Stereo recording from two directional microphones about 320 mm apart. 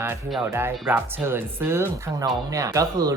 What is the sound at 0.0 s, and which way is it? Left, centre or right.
Speech, centre.